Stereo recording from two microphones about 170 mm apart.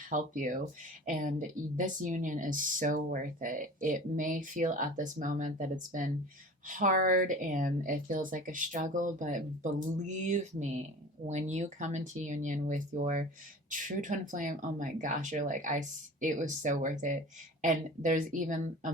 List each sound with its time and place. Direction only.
0.1 s speech: 50° right (ahead or behind)